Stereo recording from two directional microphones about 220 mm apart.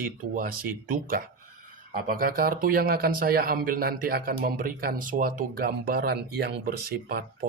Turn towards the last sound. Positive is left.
turn(degrees=-45)  # may be behind; listen again after turning